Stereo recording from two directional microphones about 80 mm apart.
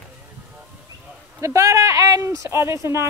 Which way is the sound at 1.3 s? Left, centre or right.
Right.